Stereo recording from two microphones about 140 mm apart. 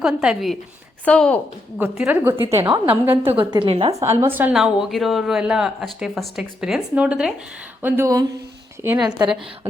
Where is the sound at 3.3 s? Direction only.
40° right (ahead or behind).